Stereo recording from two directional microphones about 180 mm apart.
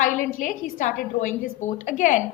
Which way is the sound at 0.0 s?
45° left (ahead or behind).